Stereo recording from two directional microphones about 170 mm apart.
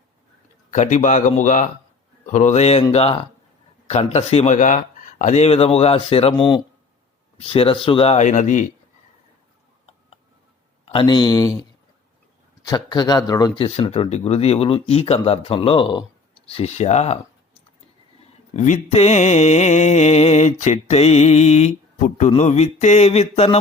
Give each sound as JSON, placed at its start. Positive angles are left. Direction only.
{"t": 0.7, "sound": "speech", "side_deg": 45}
{"t": 2.9, "sound": "mantra", "side_deg": 35}
{"t": 10.8, "sound": "speech", "side_deg": 30}
{"t": 12.6, "sound": "speech", "side_deg": 25}
{"t": 13.6, "sound": "mantra", "side_deg": 35}
{"t": 18.5, "sound": "mantra", "side_deg": 45}